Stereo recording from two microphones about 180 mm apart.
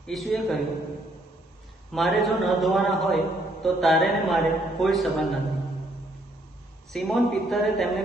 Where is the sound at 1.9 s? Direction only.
Centre (ahead or behind).